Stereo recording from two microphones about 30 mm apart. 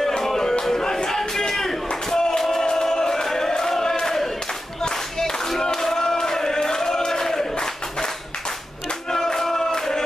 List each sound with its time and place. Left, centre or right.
0.2 s music: centre
1.5 s a sound: centre
2.7 s chant: centre
4.0 s battle cry: centre
5.6 s a sound: centre
9.1 s music: centre